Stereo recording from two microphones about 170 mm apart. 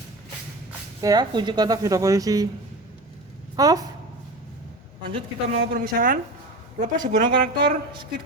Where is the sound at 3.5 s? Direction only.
20° right (ahead or behind).